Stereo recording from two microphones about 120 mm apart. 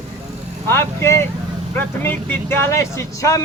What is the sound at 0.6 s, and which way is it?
Speech, 20° left (ahead or behind).